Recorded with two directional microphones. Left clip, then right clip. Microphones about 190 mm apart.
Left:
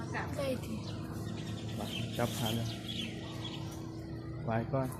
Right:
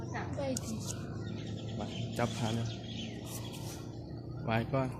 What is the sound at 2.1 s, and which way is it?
Speech, 10° right (ahead or behind).